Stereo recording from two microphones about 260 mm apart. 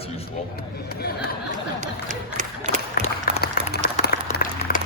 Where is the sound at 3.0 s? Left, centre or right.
Left.